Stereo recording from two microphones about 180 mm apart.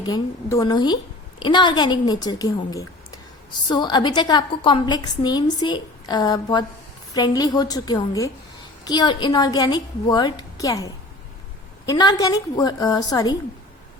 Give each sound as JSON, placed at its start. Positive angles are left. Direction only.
{"t": 0.0, "sound": "a woman's voice", "side_deg": 20}